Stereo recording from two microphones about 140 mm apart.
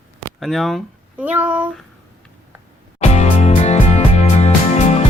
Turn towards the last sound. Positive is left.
turn(degrees=50)  # may be behind; listen again after turning